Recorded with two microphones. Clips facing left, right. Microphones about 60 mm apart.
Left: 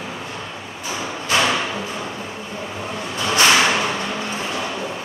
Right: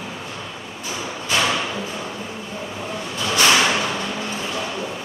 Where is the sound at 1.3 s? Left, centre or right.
Centre.